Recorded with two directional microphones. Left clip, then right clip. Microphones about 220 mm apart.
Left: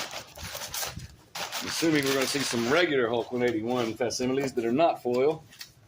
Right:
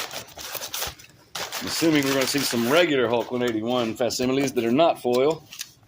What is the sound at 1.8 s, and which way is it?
Speech, 30° right (ahead or behind).